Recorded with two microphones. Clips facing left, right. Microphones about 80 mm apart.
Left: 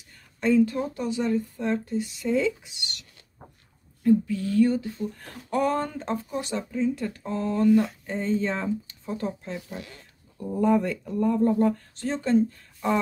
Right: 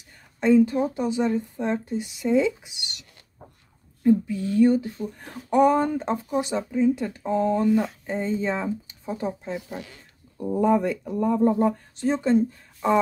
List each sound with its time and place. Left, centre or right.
0.4 s speech: centre